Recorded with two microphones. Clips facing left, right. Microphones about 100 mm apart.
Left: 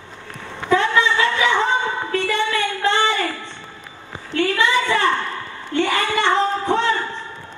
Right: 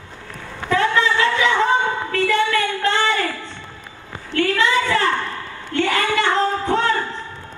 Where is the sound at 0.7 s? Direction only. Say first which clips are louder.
Left 1 dB; 25° left (ahead or behind).